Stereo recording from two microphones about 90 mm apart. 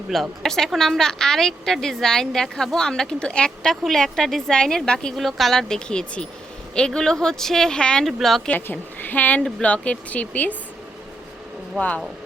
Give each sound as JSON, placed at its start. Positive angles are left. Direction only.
{"t": 0.1, "sound": "a woman's voice", "side_deg": 5}
{"t": 8.4, "sound": "a woman's voice", "side_deg": 20}